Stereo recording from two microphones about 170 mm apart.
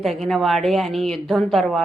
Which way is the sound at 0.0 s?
Centre (ahead or behind).